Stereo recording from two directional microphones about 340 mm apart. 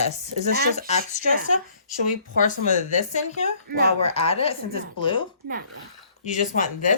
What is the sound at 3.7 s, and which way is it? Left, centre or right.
Speech, right.